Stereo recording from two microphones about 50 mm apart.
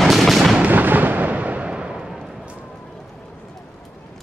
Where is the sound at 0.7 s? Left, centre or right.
Right; by 2.1 s centre.